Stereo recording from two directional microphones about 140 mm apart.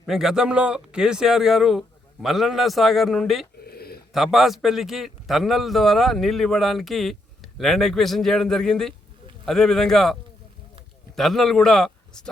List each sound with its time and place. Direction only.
0.0 s a man's voice: 5° right (ahead or behind)
3.7 s a sound: 90° left
4.1 s a man's voice: centre (ahead or behind)
11.2 s a man's voice: centre (ahead or behind)